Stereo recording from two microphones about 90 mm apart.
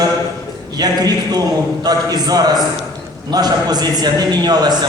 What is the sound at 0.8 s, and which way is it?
A man's voice, 45° right (ahead or behind).